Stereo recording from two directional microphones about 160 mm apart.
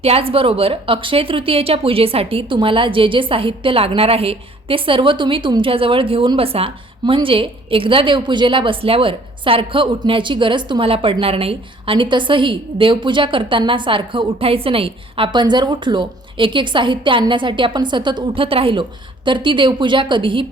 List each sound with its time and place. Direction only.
0.0 s a woman's voice: 35° right (ahead or behind)